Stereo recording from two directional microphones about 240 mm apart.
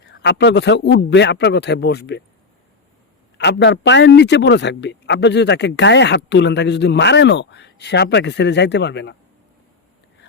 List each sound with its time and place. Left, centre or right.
0.0 s speech: left
3.3 s speech: left